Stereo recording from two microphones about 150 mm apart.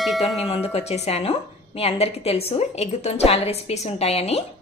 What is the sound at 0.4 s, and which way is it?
Speech, 40° left (ahead or behind).